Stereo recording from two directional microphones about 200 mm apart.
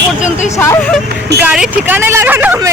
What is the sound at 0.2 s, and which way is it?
Speech, 35° left (ahead or behind).